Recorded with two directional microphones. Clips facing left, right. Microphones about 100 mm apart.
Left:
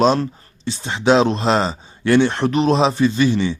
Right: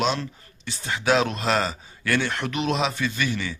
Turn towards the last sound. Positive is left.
turn(degrees=30)  # may be behind; listen again after turning